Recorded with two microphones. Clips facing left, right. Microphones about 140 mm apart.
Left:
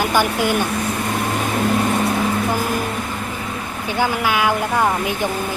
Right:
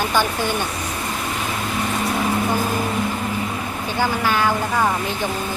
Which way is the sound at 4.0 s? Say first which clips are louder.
Left 1 dB; 10° left (ahead or behind).